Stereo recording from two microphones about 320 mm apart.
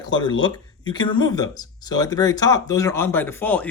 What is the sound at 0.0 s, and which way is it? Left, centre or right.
Speech, centre.